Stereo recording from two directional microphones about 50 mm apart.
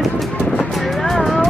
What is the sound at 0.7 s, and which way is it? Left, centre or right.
Vehicle, centre.